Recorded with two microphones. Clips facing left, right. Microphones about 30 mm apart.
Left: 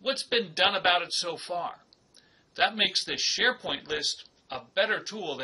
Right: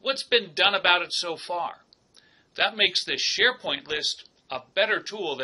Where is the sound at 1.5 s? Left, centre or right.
Right.